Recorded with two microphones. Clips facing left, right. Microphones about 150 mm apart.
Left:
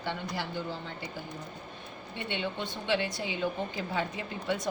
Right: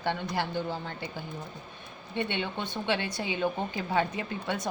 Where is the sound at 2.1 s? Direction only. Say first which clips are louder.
Right 3 dB; 60° right (ahead or behind).